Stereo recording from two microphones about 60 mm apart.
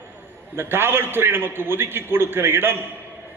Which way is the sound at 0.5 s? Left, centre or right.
Right.